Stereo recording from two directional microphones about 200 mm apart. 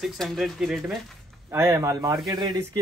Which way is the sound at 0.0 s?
Centre (ahead or behind).